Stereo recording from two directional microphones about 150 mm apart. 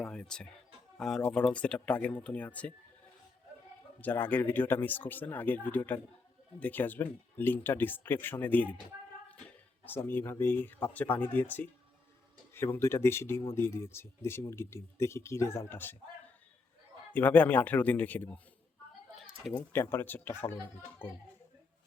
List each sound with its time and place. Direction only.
0.0 s speech: 5° left (ahead or behind)
4.0 s speech: 10° left (ahead or behind)
9.8 s speech: 15° left (ahead or behind)
17.1 s speech: 10° left (ahead or behind)
19.1 s a sound: centre (ahead or behind)
19.7 s speech: 15° left (ahead or behind)